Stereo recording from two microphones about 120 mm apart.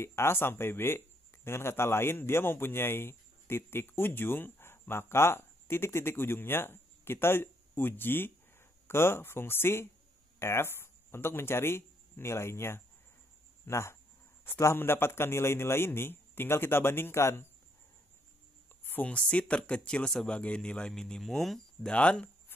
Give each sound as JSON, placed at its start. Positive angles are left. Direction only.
{"t": 0.0, "sound": "a man's voice", "side_deg": 20}
{"t": 18.9, "sound": "speech", "side_deg": 10}